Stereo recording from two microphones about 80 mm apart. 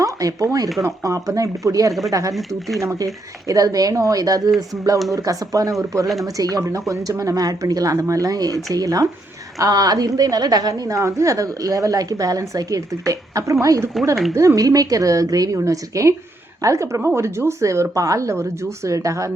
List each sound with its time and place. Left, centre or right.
0.0 s a woman's voice: right